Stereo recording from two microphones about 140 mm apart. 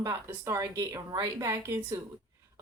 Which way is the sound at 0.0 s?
20° right (ahead or behind).